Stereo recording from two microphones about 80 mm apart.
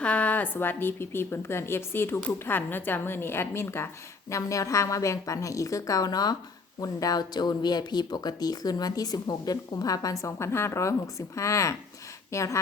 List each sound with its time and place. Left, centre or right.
0.0 s a woman's voice: centre; by 12.5 s left